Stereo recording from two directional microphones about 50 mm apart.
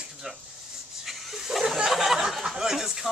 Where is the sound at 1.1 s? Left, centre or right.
Centre.